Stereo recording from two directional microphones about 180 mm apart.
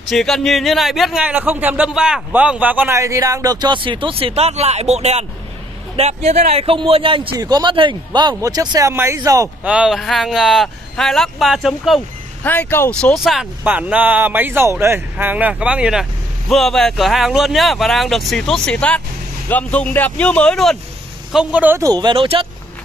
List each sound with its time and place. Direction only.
0.1 s speech: centre (ahead or behind); by 9.5 s 20° right (ahead or behind)
9.6 s speech: 5° right (ahead or behind)
12.4 s speech: 10° left (ahead or behind)
13.0 s speech: centre (ahead or behind); by 22.5 s 30° right (ahead or behind)